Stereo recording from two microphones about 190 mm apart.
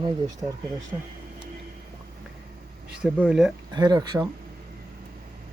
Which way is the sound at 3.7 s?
20° right (ahead or behind).